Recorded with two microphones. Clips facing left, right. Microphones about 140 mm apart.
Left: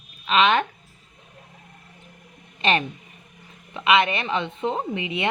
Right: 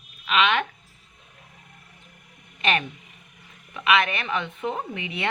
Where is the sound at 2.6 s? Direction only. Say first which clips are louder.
Left 3 dB; 30° left (ahead or behind).